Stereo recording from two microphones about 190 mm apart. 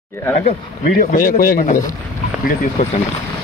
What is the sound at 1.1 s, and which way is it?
Speech, 45° left (ahead or behind).